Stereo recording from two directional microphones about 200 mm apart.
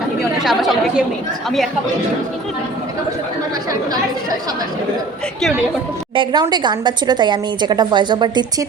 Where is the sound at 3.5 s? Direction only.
20° right (ahead or behind).